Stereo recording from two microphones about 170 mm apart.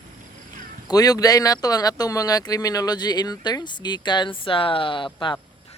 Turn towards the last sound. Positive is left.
turn(degrees=30)  # may be behind; listen again after turning